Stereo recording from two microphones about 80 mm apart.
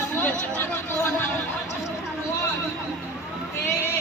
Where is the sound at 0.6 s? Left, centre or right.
Left.